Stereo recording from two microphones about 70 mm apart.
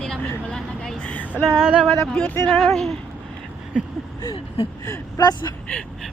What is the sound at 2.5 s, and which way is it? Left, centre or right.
Speech, centre.